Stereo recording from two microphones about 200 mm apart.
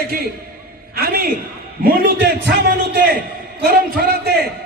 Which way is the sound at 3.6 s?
55° right (ahead or behind).